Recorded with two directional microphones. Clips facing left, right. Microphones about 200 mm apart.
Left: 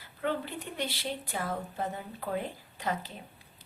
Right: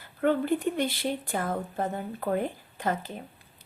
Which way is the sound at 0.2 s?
50° right (ahead or behind).